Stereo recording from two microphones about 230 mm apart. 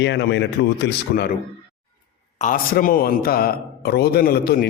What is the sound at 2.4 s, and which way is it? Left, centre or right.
A man's voice, left.